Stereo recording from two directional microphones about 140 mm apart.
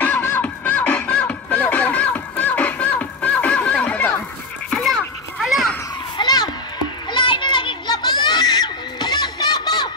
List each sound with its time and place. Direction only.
0.0 s music: 15° left (ahead or behind)
4.6 s a sound: centre (ahead or behind)
6.1 s children playing: 30° left (ahead or behind)
7.1 s neigh: 35° left (ahead or behind)